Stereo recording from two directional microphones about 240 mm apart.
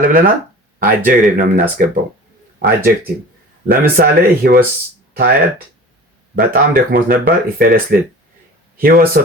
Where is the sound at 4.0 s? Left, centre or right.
Right.